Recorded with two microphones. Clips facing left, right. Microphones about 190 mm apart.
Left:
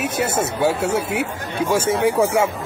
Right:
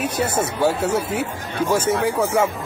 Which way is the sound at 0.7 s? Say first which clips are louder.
Even; 10° left (ahead or behind).